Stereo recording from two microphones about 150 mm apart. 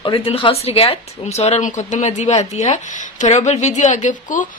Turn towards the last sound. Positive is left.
turn(degrees=60)  # may be behind; listen again after turning